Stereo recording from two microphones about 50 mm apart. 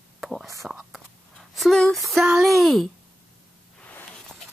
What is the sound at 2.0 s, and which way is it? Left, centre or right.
Speech, centre.